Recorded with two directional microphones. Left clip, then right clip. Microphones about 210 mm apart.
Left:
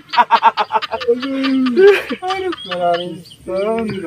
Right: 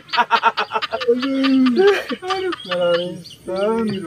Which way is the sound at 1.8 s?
30° left (ahead or behind).